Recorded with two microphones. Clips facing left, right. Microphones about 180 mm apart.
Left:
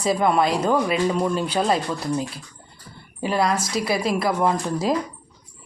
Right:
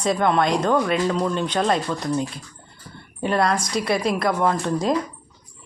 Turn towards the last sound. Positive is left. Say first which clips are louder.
# right 1 dB
turn(degrees=5)  # may be behind; listen again after turning